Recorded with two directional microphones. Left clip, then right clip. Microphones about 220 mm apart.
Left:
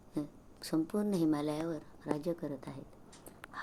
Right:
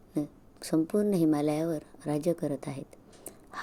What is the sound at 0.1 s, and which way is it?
A woman's voice, 25° right (ahead or behind).